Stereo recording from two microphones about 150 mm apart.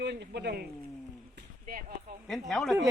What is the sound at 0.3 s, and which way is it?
Speech, 90° right.